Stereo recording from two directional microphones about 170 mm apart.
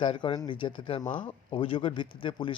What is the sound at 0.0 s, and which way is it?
Speech, 30° left (ahead or behind).